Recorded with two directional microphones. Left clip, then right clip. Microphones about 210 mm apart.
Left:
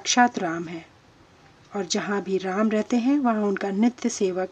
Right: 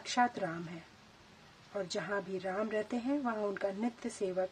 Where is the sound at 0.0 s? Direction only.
35° left (ahead or behind).